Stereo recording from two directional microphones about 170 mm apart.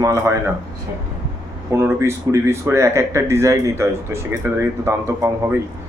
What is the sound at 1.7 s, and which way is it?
Speech, 15° right (ahead or behind).